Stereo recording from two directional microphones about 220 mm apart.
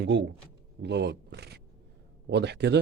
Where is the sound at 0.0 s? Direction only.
50° right (ahead or behind).